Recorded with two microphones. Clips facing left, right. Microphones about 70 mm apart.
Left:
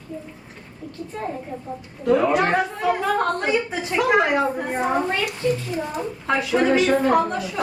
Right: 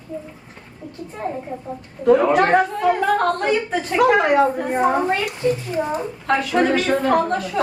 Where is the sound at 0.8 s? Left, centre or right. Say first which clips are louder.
Right 1 dB; centre.